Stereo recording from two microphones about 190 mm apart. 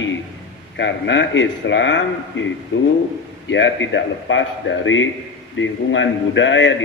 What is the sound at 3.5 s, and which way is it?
A man's voice, 75° left (ahead or behind).